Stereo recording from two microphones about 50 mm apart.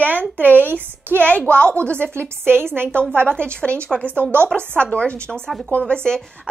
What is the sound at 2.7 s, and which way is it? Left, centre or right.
Speech, right.